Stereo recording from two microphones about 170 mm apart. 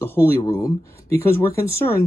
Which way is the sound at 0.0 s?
15° left (ahead or behind).